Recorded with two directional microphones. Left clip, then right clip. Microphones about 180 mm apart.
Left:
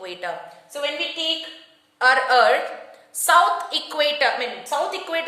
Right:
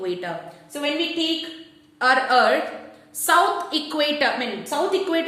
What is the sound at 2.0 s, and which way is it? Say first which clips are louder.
A woman's voice: left 1 dB; 30° left (ahead or behind).